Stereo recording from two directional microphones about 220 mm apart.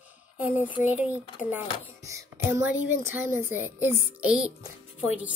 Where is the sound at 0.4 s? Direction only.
10° right (ahead or behind).